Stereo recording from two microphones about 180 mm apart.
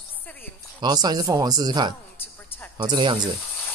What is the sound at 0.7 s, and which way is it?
Speech, 25° right (ahead or behind).